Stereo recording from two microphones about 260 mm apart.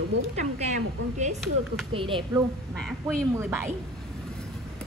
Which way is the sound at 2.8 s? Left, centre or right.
Centre.